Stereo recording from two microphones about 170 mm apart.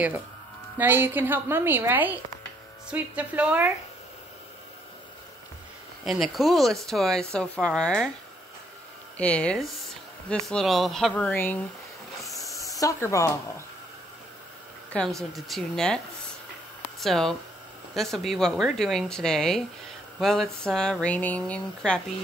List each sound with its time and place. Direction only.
0.7 s a woman's voice: 10° right (ahead or behind)
6.0 s speech: centre (ahead or behind)
9.1 s speech: 10° left (ahead or behind)
12.2 s hiss: centre (ahead or behind)
12.8 s speech: 20° left (ahead or behind)
14.9 s speech: 5° left (ahead or behind)
17.0 s speech: centre (ahead or behind)